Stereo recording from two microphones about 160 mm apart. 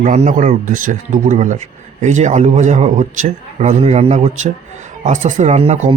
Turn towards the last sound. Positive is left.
turn(degrees=-40)  # may be behind; listen again after turning